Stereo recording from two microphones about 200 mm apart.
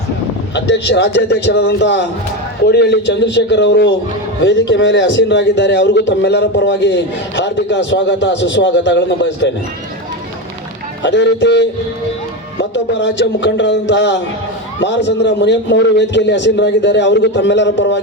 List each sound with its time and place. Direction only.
0.5 s a man's voice: 60° left (ahead or behind)
11.0 s a man's voice: 60° left (ahead or behind)